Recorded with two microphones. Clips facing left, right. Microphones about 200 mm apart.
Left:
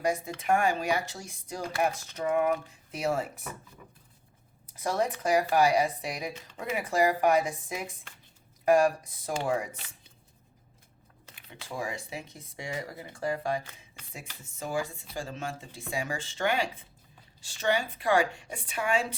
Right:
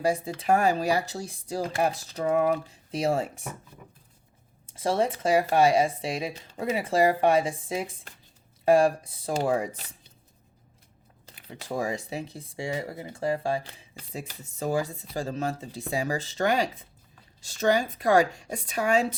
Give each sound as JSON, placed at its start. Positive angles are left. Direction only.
{"t": 0.0, "sound": "speech", "side_deg": -30}
{"t": 4.6, "sound": "speech", "side_deg": -30}
{"t": 11.3, "sound": "speech", "side_deg": -40}